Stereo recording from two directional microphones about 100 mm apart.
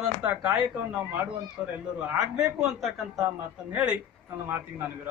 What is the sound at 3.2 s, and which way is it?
Speech, 15° right (ahead or behind).